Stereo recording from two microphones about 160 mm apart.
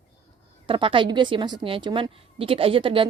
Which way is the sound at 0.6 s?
35° right (ahead or behind).